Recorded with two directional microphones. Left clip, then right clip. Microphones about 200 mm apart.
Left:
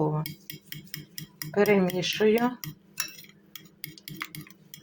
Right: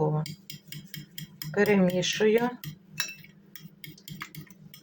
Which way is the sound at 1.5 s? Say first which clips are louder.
Left 1 dB; 10° left (ahead or behind).